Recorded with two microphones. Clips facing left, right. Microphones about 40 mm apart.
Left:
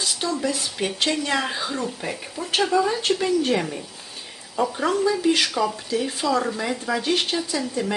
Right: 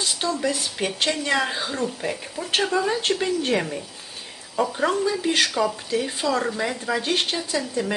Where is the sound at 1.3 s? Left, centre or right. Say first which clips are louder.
Right 1 dB; centre.